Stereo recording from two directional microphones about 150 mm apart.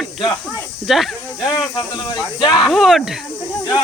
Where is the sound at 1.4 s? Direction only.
30° left (ahead or behind).